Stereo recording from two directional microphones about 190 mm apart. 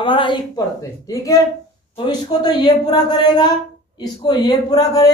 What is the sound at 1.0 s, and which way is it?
A man's voice, 20° left (ahead or behind).